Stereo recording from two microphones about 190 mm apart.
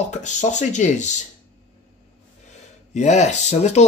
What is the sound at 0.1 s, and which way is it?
Speech, 40° left (ahead or behind).